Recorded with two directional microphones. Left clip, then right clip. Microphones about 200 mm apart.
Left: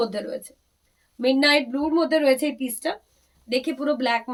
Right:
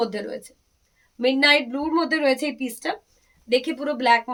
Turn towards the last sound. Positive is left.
turn(degrees=-20)  # may be behind; listen again after turning